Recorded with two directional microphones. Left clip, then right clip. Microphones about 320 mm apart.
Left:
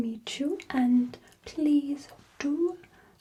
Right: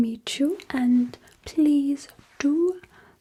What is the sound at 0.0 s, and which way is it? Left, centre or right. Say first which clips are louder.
Whispering: right 7 dB; right.